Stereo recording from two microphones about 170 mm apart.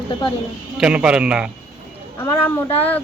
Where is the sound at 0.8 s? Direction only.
5° right (ahead or behind).